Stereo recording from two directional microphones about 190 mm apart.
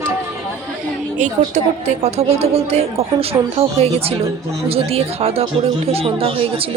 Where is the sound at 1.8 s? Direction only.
35° right (ahead or behind).